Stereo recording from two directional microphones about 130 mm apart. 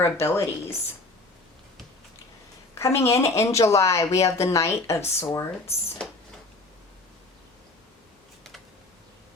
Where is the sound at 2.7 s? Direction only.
20° left (ahead or behind).